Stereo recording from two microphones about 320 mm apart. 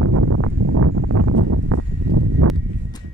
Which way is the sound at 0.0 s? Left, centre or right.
Right.